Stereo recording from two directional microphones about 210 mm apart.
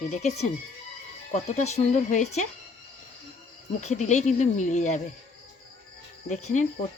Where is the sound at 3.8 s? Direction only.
35° left (ahead or behind).